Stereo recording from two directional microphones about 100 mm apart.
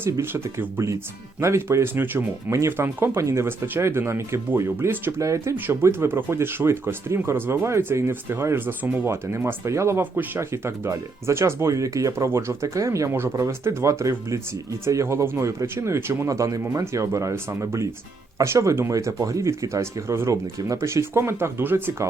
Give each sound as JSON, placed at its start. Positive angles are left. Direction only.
{"t": 0.0, "sound": "speech", "side_deg": -25}